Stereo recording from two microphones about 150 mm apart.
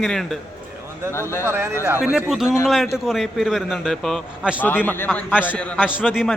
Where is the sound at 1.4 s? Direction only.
15° right (ahead or behind); by 4.5 s centre (ahead or behind).